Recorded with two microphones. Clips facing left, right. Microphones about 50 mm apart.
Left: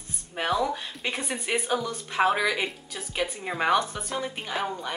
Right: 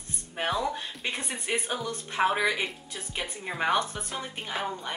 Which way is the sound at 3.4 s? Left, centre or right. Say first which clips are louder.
Left 2 dB; centre.